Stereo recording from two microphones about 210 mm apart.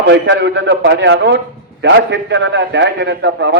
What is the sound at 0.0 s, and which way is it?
A man's voice, 55° right (ahead or behind).